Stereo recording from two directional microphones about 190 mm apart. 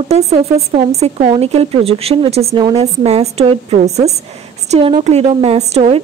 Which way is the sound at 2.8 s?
35° right (ahead or behind).